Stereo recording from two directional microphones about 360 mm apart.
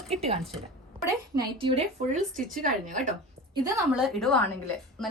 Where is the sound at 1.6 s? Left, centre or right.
Centre.